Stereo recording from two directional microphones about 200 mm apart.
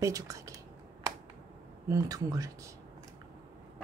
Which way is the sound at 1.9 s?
15° right (ahead or behind).